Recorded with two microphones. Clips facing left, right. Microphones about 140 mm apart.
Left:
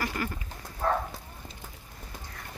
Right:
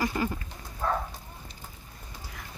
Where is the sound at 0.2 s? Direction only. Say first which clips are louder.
Right 4 dB; 20° right (ahead or behind).